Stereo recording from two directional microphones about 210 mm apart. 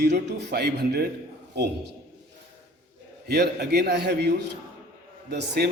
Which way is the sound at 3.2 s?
50° right (ahead or behind).